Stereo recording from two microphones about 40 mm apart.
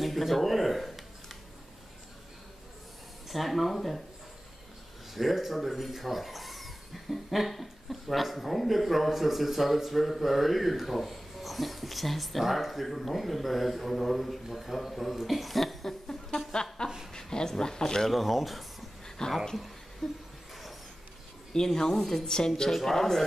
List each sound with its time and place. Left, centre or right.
0.0 s a sound: centre
3.3 s speech: centre
5.1 s speech: centre
18.1 s speech: centre
19.0 s a sound: centre
20.0 s speech: centre
21.5 s a woman's voice: centre